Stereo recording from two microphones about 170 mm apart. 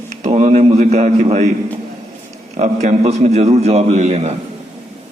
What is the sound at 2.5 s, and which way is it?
A man's voice, 40° right (ahead or behind).